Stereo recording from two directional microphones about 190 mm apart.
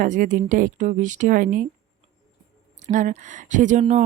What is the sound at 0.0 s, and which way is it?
Speech, 40° right (ahead or behind).